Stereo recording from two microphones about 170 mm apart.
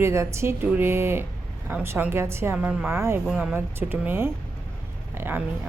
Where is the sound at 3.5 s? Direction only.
10° right (ahead or behind).